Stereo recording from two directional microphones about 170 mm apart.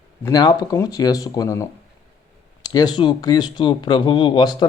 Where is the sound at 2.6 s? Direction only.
25° left (ahead or behind).